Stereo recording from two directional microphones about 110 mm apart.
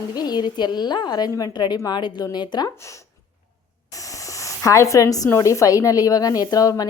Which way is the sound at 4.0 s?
30° left (ahead or behind).